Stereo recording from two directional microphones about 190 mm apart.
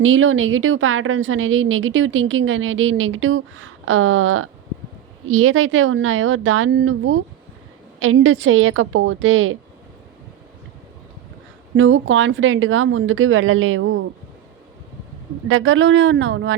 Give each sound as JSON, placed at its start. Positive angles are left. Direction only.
{"t": 0.0, "sound": "a woman's voice", "side_deg": -90}
{"t": 11.8, "sound": "a woman's voice", "side_deg": -85}
{"t": 15.4, "sound": "speech", "side_deg": -90}